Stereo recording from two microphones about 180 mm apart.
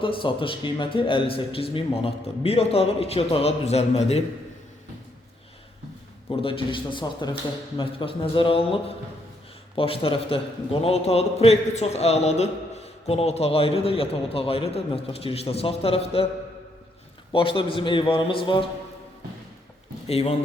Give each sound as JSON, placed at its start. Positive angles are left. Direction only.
{"t": 0.0, "sound": "a man's voice", "side_deg": 30}
{"t": 6.3, "sound": "a man's voice", "side_deg": 30}
{"t": 17.3, "sound": "a man's voice", "side_deg": 30}
{"t": 20.1, "sound": "a man's voice", "side_deg": 35}